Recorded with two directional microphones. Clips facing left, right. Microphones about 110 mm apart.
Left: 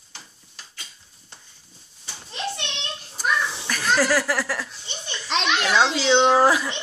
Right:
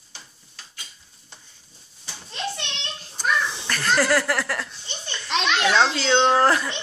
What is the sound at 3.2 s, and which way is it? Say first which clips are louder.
A child's voice: even; 5° left (ahead or behind).